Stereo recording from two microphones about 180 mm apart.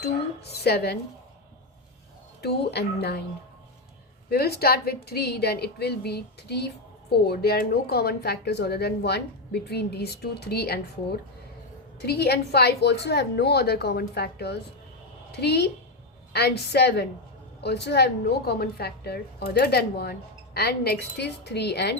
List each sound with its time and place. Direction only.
0.6 s a woman's voice: 65° left (ahead or behind)
2.4 s a woman's voice: 65° left (ahead or behind)
4.3 s a woman's voice: 60° left (ahead or behind)
12.0 s a woman's voice: 65° left (ahead or behind)